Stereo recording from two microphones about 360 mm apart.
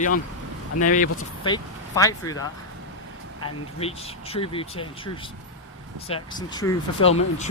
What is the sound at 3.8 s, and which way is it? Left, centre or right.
Speech, centre.